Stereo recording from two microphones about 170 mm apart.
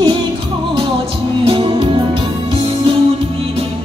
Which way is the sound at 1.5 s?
30° right (ahead or behind).